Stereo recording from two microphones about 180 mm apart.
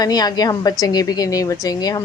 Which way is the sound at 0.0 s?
20° left (ahead or behind).